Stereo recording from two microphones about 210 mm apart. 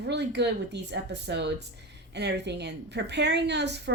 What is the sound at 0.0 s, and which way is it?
A woman's voice, 55° right (ahead or behind).